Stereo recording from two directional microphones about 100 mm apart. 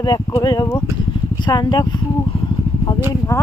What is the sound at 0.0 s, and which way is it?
Speech, 45° left (ahead or behind).